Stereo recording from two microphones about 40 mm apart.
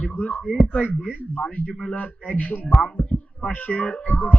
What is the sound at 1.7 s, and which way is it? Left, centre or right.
Speech, left.